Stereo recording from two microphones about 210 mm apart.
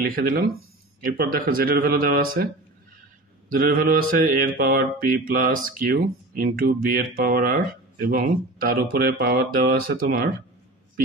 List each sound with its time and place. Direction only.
0.1 s mantra: 45° right (ahead or behind)